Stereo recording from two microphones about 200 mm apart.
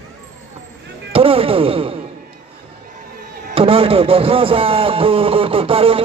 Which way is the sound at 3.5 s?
25° right (ahead or behind).